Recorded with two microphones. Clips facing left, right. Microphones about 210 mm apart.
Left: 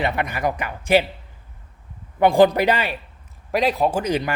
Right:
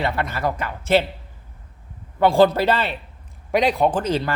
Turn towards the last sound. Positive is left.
turn(degrees=15)  # may be behind; listen again after turning